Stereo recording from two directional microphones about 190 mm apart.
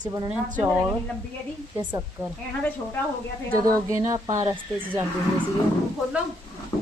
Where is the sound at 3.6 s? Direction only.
15° right (ahead or behind).